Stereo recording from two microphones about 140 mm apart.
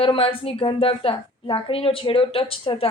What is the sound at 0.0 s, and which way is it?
A woman's voice, 40° left (ahead or behind).